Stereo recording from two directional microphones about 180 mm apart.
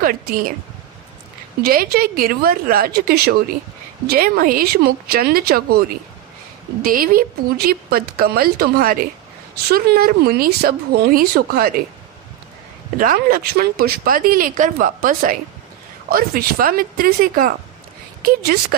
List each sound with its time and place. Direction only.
0.0 s speech: 50° right (ahead or behind)
1.6 s speech: 55° right (ahead or behind)
12.9 s speech: 50° right (ahead or behind)